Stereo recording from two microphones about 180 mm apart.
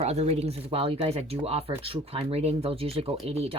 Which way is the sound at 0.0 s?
35° right (ahead or behind).